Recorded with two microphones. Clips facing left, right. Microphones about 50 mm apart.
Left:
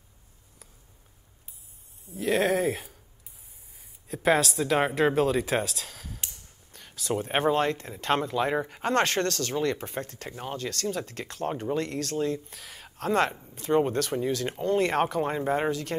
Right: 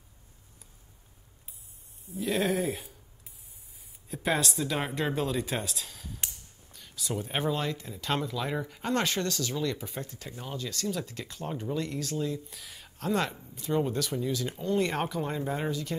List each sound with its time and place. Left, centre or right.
2.1 s speech: left
4.1 s speech: centre
4.6 s a woman's voice: left
5.1 s speech: left
5.9 s a sound: left
6.7 s a sound: left
7.2 s speech: left
12.8 s speech: left
15.7 s speech: left